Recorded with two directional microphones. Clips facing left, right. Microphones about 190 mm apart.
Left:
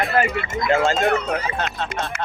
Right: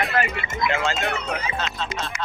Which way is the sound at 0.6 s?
45° left (ahead or behind).